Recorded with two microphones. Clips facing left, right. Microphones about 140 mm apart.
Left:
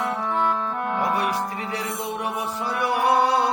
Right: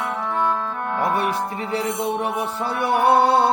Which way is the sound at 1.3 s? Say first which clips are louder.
Right 2 dB; 25° right (ahead or behind).